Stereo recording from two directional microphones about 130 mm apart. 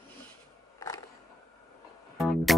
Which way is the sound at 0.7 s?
25° left (ahead or behind).